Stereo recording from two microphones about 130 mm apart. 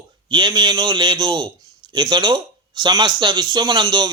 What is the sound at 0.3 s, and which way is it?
A man's voice, 35° right (ahead or behind).